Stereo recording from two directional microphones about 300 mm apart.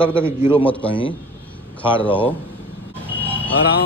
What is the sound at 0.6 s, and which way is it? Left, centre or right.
Speech, centre.